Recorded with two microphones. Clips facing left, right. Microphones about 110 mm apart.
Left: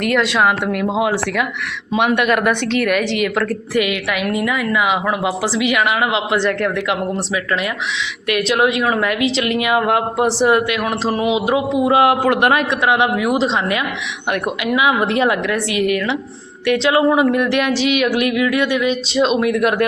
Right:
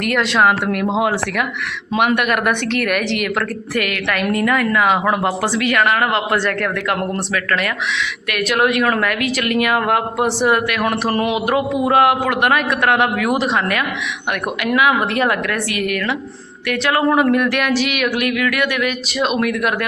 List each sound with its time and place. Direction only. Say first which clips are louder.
0.4 s a woman's voice: right 1 dB; 20° left (ahead or behind)
2.1 s a woman's voice: left 2 dB; 25° left (ahead or behind)
4.2 s speech: right 5 dB; 5° left (ahead or behind)
8.3 s a woman's voice: left 1 dB; 25° left (ahead or behind)
11.1 s speech: left 1 dB; 5° left (ahead or behind)
11.3 s a woman's voice: left 1 dB; 20° left (ahead or behind)
12.2 s a woman's voice: left 2 dB; 30° left (ahead or behind)
12.8 s a woman's voice: even; 15° left (ahead or behind); by 19.9 s 35° left (ahead or behind)